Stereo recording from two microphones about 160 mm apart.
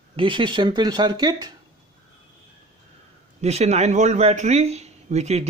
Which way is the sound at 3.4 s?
40° right (ahead or behind).